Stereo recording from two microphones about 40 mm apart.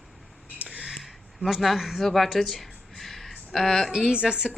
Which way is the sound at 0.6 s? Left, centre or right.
Right.